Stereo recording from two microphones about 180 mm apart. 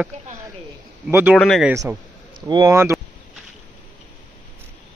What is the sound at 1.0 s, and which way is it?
Speech, 10° right (ahead or behind).